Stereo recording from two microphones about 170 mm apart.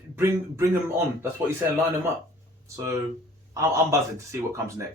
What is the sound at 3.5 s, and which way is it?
Speech, 15° right (ahead or behind).